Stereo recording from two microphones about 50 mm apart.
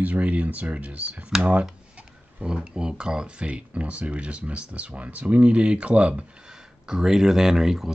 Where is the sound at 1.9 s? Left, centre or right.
Right.